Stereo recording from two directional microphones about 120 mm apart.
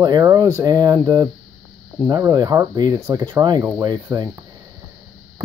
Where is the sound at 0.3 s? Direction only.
25° right (ahead or behind).